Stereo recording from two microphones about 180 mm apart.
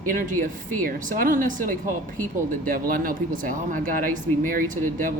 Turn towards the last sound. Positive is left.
turn(degrees=-50)  # may be behind; listen again after turning